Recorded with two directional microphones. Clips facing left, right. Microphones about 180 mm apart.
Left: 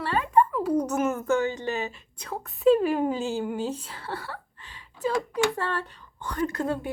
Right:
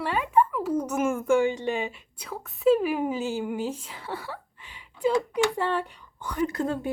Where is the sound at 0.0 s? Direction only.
10° right (ahead or behind).